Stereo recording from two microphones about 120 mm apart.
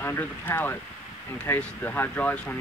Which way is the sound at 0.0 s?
15° left (ahead or behind).